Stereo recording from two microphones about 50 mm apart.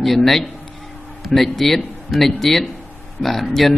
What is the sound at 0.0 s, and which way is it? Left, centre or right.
A man's voice, centre.